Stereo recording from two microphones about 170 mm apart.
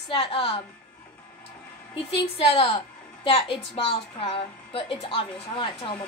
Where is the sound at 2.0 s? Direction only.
35° left (ahead or behind).